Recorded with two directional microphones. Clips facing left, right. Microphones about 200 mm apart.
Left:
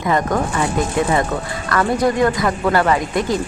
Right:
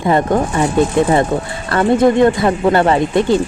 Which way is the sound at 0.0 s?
30° right (ahead or behind).